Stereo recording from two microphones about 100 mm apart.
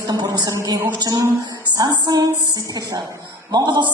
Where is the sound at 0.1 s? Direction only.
40° right (ahead or behind).